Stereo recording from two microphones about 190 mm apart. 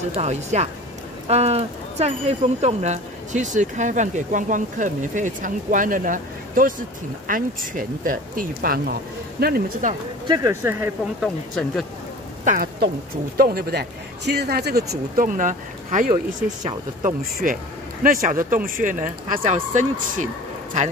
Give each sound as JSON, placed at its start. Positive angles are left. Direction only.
{"t": 0.1, "sound": "speech", "side_deg": -35}
{"t": 10.2, "sound": "speech", "side_deg": -15}
{"t": 11.1, "sound": "speech", "side_deg": 0}
{"t": 12.4, "sound": "a man's voice", "side_deg": -50}
{"t": 15.1, "sound": "speech", "side_deg": -45}